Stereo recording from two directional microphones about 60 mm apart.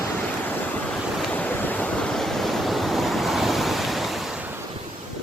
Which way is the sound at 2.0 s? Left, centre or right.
Centre.